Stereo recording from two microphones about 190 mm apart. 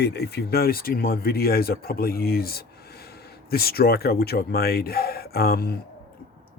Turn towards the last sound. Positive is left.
turn(degrees=55)  # may be behind; listen again after turning